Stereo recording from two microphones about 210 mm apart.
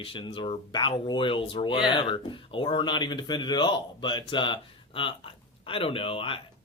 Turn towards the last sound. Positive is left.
turn(degrees=25)  # may be behind; listen again after turning